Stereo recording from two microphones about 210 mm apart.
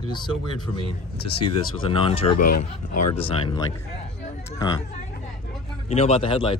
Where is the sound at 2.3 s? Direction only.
45° left (ahead or behind).